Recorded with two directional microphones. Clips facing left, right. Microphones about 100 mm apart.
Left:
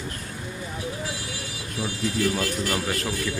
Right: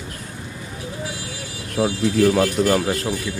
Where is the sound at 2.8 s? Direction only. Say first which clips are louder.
Right 5 dB; 30° right (ahead or behind).